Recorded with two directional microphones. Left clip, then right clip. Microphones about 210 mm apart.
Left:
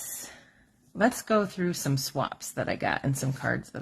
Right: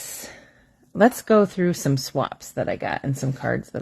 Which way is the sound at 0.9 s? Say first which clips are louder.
Right 8 dB; 40° right (ahead or behind).